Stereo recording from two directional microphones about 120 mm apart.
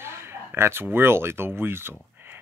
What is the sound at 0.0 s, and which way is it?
Speech, 20° right (ahead or behind).